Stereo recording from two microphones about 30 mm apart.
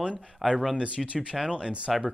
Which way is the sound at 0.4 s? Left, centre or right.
Centre.